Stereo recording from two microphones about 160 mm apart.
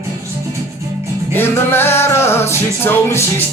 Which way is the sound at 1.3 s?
15° left (ahead or behind).